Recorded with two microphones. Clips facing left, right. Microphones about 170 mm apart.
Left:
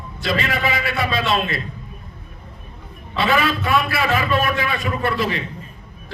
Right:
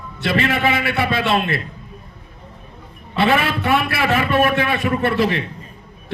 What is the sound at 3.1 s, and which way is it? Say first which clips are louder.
A man's voice: right 2 dB; 60° right (ahead or behind).